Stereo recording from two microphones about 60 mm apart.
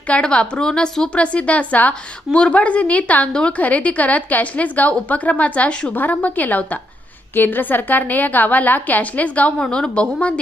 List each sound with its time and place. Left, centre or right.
0.1 s a woman's voice: centre